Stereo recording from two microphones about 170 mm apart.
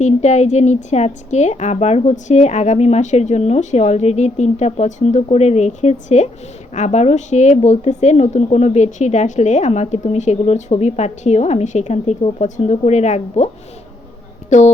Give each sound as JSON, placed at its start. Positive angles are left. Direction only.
{"t": 0.0, "sound": "a woman's voice", "side_deg": 40}
{"t": 14.5, "sound": "music", "side_deg": 45}